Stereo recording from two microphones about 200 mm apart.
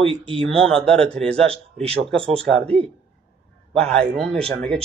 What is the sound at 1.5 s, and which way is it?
Speech, 30° right (ahead or behind).